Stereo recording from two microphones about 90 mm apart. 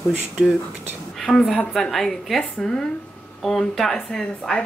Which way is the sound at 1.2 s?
Centre (ahead or behind).